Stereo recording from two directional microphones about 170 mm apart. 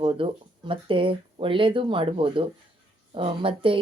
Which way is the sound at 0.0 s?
30° right (ahead or behind).